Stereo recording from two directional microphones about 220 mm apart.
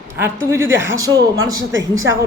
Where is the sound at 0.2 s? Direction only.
10° right (ahead or behind).